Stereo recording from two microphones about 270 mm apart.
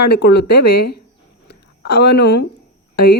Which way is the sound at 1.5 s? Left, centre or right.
Left.